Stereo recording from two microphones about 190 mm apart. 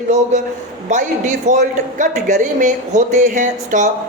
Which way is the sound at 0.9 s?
40° right (ahead or behind).